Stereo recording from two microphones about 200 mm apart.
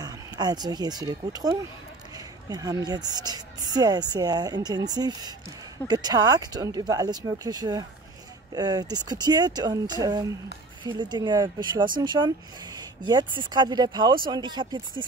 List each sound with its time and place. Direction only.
0.0 s speech: 20° right (ahead or behind)